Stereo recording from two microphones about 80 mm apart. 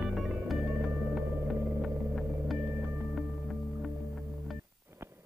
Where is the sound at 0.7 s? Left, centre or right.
Right.